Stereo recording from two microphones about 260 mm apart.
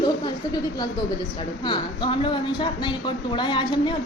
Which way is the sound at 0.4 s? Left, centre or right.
Centre.